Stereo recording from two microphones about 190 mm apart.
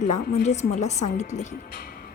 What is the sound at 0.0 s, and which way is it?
Speech, 40° left (ahead or behind).